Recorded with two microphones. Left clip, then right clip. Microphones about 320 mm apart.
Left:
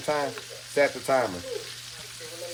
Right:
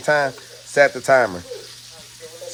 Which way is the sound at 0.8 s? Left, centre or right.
Right.